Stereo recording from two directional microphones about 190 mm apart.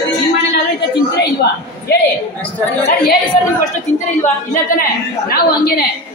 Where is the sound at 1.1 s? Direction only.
60° left (ahead or behind).